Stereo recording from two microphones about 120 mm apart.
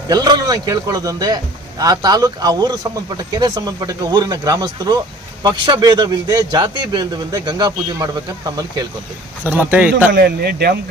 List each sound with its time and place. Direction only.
0.1 s a man's voice: 35° right (ahead or behind)
9.6 s a man's voice: 15° right (ahead or behind)